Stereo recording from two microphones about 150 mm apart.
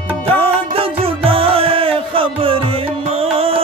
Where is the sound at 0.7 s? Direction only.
40° right (ahead or behind).